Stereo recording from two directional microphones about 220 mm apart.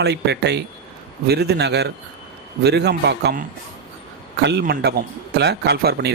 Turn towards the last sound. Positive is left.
turn(degrees=-45)  # may be behind; listen again after turning